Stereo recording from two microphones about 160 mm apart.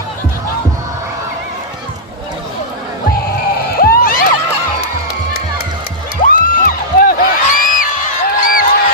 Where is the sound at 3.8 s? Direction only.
65° left (ahead or behind).